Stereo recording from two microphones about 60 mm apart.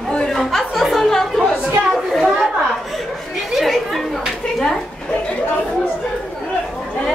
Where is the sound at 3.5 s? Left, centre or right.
Centre.